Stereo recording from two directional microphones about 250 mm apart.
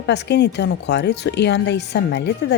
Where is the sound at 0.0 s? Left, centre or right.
Left.